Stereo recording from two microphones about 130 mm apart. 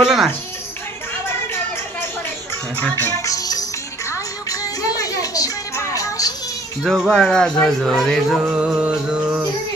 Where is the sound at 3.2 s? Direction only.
25° left (ahead or behind).